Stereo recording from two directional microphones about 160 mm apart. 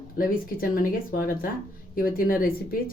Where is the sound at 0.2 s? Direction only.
65° left (ahead or behind).